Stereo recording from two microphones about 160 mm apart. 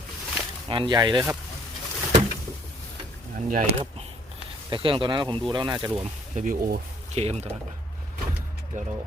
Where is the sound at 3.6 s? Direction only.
40° right (ahead or behind).